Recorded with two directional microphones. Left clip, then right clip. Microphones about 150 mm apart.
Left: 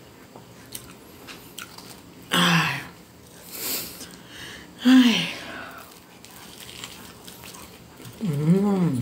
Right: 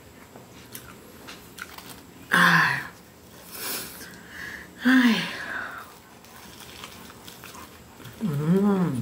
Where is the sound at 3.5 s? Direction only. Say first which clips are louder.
Left 2 dB; 20° left (ahead or behind).